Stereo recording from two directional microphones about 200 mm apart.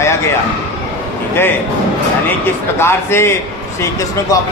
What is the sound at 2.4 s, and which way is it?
Speech, 10° left (ahead or behind).